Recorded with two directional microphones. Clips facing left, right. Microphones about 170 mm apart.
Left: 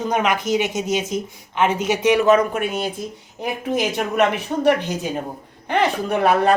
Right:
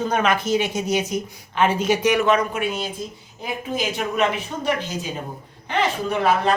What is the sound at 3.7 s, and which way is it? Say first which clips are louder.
Speech: left 3 dB; 65° left (ahead or behind).